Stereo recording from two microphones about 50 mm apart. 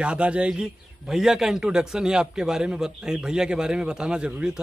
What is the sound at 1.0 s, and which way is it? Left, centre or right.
A man's voice, centre.